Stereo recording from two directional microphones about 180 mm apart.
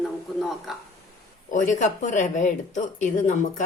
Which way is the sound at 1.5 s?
45° left (ahead or behind).